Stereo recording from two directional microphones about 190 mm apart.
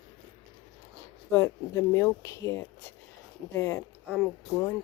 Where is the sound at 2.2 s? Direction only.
15° left (ahead or behind).